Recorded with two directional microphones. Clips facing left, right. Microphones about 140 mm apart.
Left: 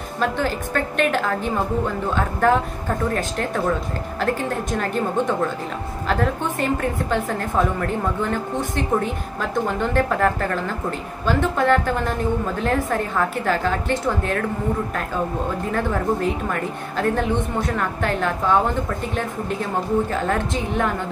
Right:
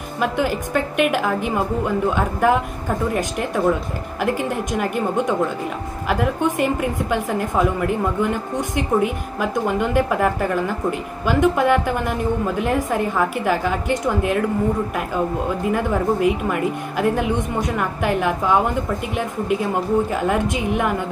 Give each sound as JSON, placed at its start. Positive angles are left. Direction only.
{"t": 0.2, "sound": "a woman's voice", "side_deg": -10}
{"t": 15.7, "sound": "a woman's voice", "side_deg": -10}